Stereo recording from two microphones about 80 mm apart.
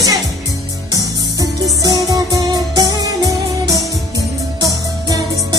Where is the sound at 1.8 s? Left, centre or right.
Right.